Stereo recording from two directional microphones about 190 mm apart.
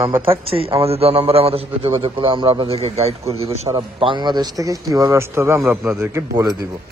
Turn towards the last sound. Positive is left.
turn(degrees=-20)  # may be behind; listen again after turning